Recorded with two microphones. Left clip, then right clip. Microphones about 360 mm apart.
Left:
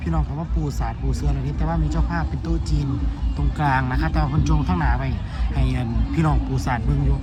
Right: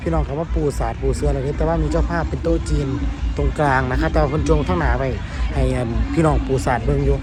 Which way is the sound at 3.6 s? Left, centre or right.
Centre.